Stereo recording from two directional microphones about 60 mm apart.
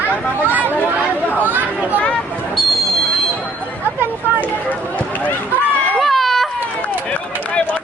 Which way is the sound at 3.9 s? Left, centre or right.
Right.